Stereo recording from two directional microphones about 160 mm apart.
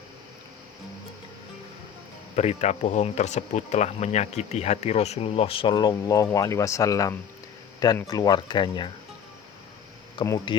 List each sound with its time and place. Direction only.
2.3 s speech: 45° left (ahead or behind); by 8.9 s 30° left (ahead or behind)
10.2 s speech: 25° left (ahead or behind)